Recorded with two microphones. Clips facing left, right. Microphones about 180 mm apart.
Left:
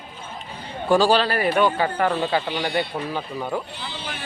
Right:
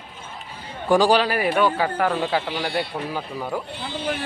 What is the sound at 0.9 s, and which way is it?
Speech, 15° right (ahead or behind).